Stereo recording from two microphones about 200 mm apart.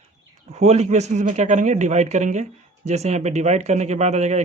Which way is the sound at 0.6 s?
35° right (ahead or behind).